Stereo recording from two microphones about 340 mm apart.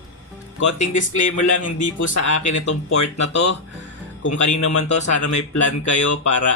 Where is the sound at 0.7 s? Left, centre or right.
Left.